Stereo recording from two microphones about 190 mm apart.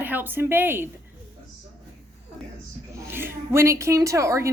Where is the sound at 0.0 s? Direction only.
10° right (ahead or behind).